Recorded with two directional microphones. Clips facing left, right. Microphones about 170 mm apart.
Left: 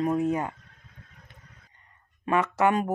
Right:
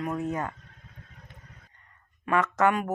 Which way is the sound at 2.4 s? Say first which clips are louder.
Even; 10° left (ahead or behind).